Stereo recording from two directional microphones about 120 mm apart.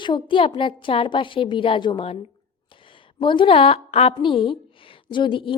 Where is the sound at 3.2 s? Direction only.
45° left (ahead or behind).